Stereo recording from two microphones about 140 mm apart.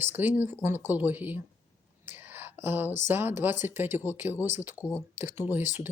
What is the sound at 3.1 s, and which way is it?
Speech, 15° right (ahead or behind).